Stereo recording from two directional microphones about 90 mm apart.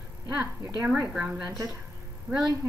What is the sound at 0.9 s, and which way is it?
Speech, 10° right (ahead or behind).